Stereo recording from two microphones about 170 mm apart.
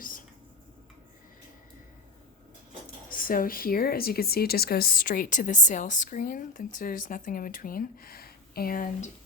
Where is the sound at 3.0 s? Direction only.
55° left (ahead or behind).